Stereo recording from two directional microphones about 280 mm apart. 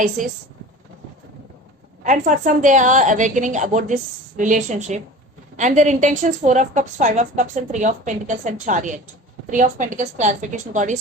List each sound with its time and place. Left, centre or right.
0.2 s a woman's voice: right
2.0 s a woman's voice: right